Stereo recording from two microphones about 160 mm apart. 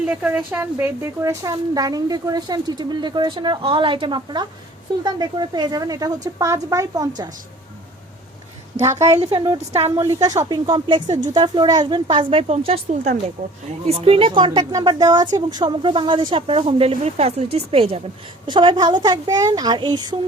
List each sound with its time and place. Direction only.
0.0 s a child's voice: 10° right (ahead or behind)
9.1 s a child's voice: 35° right (ahead or behind)